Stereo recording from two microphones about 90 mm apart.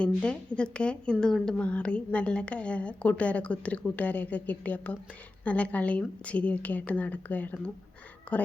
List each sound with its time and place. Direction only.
0.0 s a woman's voice: 10° left (ahead or behind)